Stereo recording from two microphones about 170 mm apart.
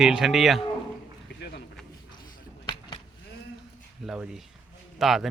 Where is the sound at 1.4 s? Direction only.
90° left.